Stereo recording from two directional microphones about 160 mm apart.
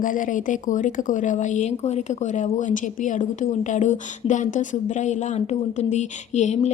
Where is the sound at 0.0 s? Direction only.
55° left (ahead or behind).